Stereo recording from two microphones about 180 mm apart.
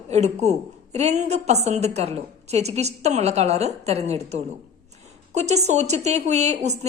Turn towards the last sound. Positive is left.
turn(degrees=-40)  # may be behind; listen again after turning